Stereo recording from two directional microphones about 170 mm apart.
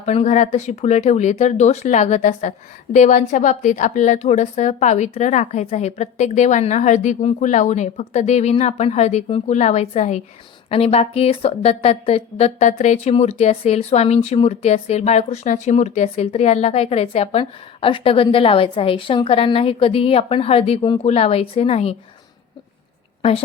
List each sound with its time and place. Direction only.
0.0 s a woman's voice: 40° left (ahead or behind)